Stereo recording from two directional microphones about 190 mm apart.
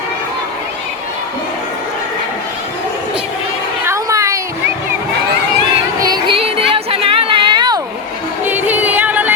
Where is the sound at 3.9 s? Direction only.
15° right (ahead or behind).